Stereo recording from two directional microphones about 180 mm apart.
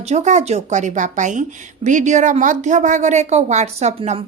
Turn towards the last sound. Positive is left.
turn(degrees=-35)  # may be behind; listen again after turning